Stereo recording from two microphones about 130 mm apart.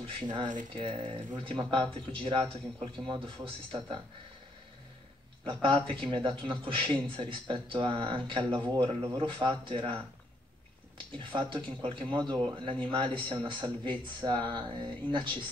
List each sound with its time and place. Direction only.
0.0 s a man's voice: 35° right (ahead or behind)
5.4 s a man's voice: 40° right (ahead or behind)
11.1 s a man's voice: 40° right (ahead or behind)